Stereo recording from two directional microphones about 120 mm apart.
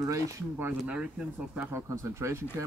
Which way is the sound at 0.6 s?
10° right (ahead or behind).